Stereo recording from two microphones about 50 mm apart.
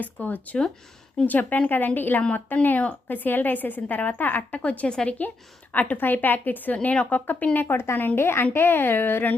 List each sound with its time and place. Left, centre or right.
0.0 s a woman's voice: left
8.2 s a woman's voice: left